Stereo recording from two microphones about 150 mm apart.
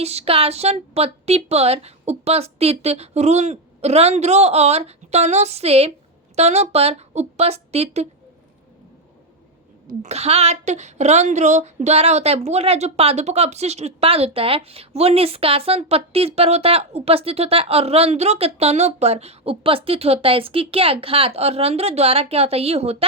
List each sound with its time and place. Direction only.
0.0 s a woman's voice: 45° right (ahead or behind)
9.8 s a woman's voice: 50° right (ahead or behind)